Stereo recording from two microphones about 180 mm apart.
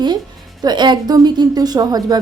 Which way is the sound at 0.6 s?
25° right (ahead or behind).